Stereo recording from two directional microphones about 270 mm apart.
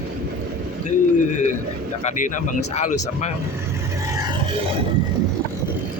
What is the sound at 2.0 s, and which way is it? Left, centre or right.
Speech, left.